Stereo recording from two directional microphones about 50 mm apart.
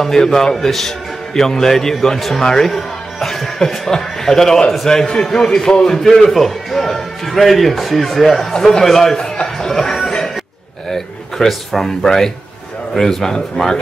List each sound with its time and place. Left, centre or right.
0.0 s a man's voice: centre
9.6 s music: centre
10.9 s a man's voice: centre